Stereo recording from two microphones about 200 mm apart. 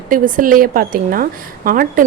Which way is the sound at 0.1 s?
45° right (ahead or behind).